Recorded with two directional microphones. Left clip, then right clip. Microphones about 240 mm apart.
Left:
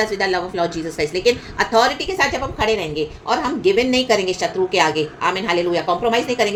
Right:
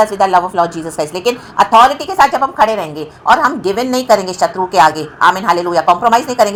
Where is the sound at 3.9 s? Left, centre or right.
Right.